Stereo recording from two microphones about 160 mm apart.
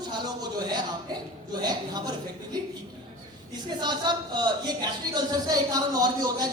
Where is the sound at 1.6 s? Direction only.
25° right (ahead or behind).